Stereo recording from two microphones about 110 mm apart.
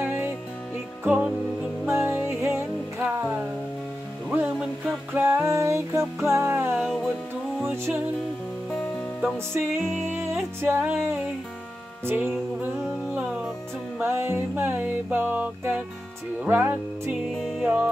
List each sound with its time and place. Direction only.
0.0 s music: 20° right (ahead or behind)
1.0 s music: 5° right (ahead or behind)
1.9 s music: 20° right (ahead or behind)
5.2 s music: 25° right (ahead or behind)
6.8 s music: centre (ahead or behind)
7.7 s music: 20° right (ahead or behind)
9.5 s music: 20° right (ahead or behind)
12.0 s music: 20° right (ahead or behind)
17.1 s music: 5° right (ahead or behind)